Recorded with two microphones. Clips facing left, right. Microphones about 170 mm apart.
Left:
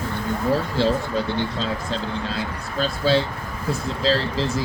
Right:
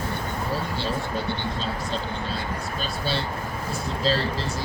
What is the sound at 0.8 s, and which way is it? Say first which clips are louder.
Speech: left 7 dB; 90° left.